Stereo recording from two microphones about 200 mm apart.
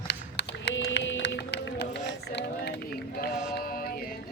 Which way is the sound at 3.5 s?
50° left (ahead or behind).